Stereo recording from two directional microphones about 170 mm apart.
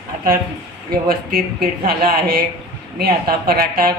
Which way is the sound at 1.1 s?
60° right (ahead or behind).